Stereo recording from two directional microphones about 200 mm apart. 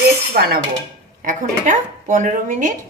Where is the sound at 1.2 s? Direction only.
40° right (ahead or behind).